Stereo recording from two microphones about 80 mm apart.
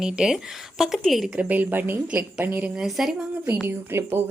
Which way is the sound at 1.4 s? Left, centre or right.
Centre.